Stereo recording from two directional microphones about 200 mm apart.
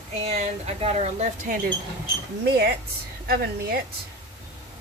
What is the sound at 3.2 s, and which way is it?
Speech, 50° right (ahead or behind).